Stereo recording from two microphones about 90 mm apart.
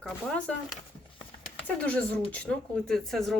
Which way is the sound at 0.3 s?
15° left (ahead or behind).